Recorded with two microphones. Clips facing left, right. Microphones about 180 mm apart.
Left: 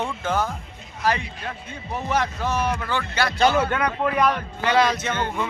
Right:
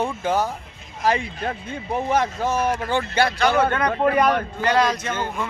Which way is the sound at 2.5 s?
45° right (ahead or behind).